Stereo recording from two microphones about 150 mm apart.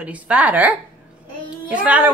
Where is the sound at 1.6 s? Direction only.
10° right (ahead or behind).